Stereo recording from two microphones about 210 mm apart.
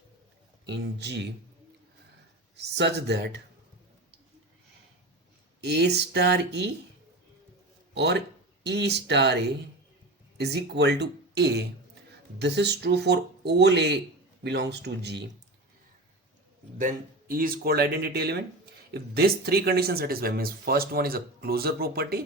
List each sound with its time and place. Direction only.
0.6 s speech: 55° right (ahead or behind)
2.7 s speech: 55° right (ahead or behind)
5.5 s speech: 50° right (ahead or behind)
7.9 s speech: 55° right (ahead or behind)
16.7 s speech: 40° right (ahead or behind)